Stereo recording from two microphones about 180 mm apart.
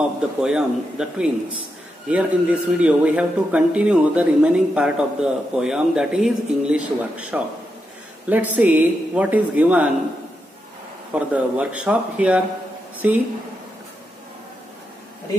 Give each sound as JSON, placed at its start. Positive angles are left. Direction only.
{"t": 0.4, "sound": "speech", "side_deg": -5}
{"t": 11.1, "sound": "speech", "side_deg": -5}